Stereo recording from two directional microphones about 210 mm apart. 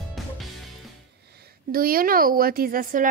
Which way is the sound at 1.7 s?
45° right (ahead or behind).